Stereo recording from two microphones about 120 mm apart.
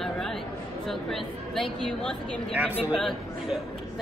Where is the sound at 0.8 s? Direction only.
5° left (ahead or behind).